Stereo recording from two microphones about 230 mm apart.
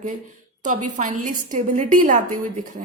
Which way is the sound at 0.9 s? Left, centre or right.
Right.